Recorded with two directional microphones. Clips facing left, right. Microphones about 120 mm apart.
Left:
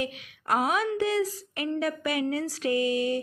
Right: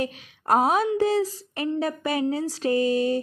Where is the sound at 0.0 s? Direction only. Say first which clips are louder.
Right 4 dB; 35° right (ahead or behind).